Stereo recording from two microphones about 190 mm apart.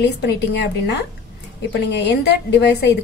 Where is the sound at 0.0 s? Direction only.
60° left (ahead or behind).